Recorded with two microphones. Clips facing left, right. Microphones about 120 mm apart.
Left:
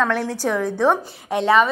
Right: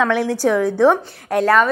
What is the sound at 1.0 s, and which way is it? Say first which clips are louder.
Speech: right 4 dB; 5° left (ahead or behind).